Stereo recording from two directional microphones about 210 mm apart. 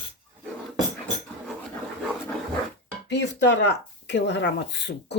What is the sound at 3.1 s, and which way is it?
Speech, 55° left (ahead or behind).